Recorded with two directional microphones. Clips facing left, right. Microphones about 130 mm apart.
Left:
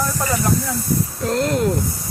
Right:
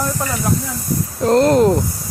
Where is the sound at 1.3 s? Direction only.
40° right (ahead or behind).